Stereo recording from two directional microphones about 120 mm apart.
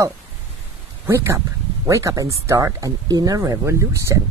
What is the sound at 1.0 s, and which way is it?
Speech, 20° right (ahead or behind).